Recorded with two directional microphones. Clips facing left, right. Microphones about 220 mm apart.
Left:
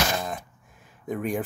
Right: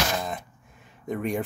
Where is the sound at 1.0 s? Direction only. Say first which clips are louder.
Even; centre (ahead or behind).